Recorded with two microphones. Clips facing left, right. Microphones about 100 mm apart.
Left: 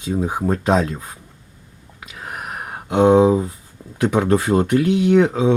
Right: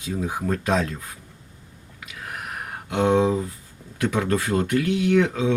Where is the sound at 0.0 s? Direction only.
25° left (ahead or behind).